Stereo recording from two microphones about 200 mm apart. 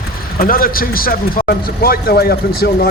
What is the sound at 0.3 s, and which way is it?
Speech, 45° left (ahead or behind).